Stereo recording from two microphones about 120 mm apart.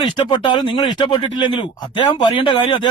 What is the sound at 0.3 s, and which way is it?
A man's voice, 40° left (ahead or behind).